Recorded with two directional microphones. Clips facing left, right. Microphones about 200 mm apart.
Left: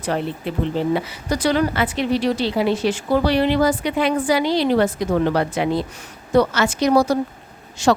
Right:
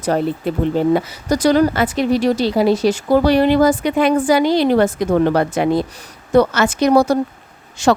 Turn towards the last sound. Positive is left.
turn(degrees=-55)  # may be behind; listen again after turning